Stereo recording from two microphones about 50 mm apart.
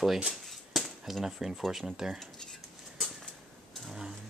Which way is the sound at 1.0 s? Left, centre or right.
Centre.